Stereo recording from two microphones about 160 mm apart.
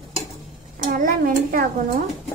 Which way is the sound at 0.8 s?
60° right (ahead or behind).